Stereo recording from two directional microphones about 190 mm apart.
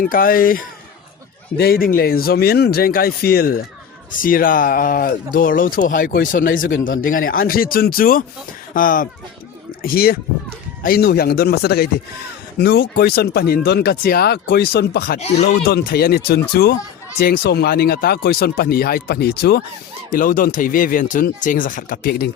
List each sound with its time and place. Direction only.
0.0 s speech: 50° left (ahead or behind)